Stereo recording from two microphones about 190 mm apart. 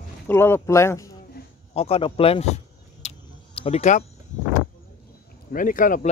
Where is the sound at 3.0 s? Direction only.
35° left (ahead or behind).